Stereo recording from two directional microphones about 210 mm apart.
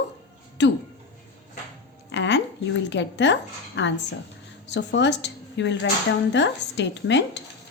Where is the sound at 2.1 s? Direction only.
55° left (ahead or behind).